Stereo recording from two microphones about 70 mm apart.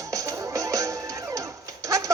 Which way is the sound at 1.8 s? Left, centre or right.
Right.